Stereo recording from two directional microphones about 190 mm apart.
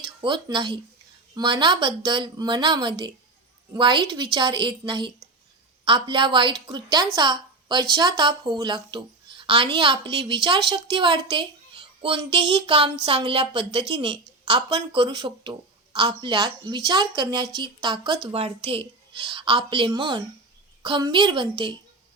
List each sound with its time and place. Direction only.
0.2 s a woman's voice: 25° right (ahead or behind)